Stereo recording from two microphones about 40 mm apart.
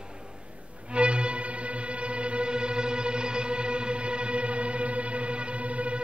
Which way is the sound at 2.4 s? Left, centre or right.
Right.